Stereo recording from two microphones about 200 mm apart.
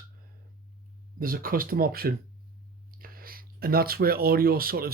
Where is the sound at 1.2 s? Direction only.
45° right (ahead or behind).